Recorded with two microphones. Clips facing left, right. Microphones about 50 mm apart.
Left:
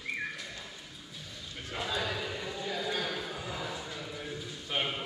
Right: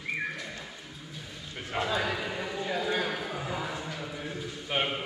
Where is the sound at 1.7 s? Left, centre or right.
Right.